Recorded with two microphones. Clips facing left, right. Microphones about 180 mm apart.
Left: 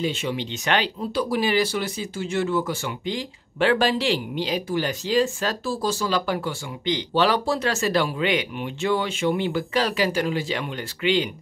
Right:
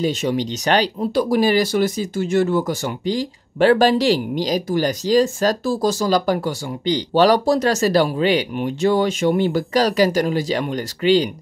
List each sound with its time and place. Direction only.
0.0 s speech: 40° right (ahead or behind)